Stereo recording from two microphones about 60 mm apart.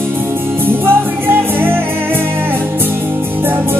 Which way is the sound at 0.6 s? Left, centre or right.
Right.